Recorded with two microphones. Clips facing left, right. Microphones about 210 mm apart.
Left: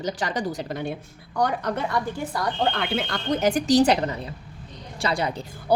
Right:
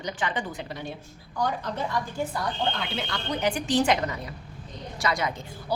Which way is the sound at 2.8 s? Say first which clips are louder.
Left 5 dB; 55° left (ahead or behind).